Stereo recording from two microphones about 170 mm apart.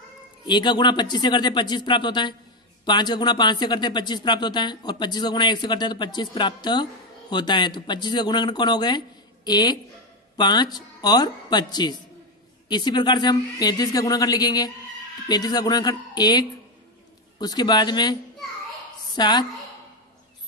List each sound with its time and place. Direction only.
0.5 s speech: 25° left (ahead or behind)
19.1 s speech: 25° left (ahead or behind)